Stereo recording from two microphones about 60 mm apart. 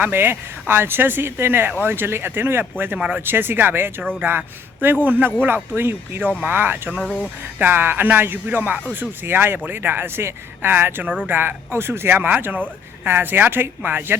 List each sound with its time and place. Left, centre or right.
0.0 s speech: right
7.0 s speech: left
7.6 s speech: right